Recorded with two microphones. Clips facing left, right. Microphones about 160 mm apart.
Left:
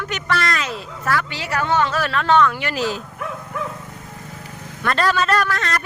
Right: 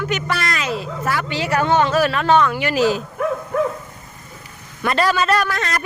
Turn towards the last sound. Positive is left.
turn(degrees=-10)  # may be behind; listen again after turning